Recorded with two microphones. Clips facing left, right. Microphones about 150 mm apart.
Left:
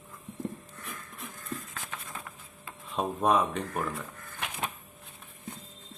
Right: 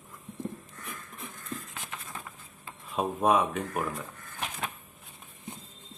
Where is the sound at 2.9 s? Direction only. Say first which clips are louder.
Right 1 dB; 5° right (ahead or behind).